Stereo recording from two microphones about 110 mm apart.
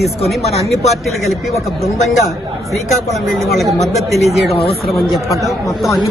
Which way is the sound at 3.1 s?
Centre (ahead or behind).